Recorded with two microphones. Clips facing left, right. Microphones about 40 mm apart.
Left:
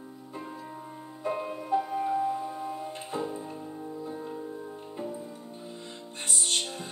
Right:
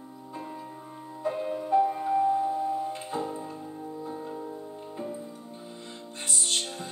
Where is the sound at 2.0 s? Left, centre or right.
Centre.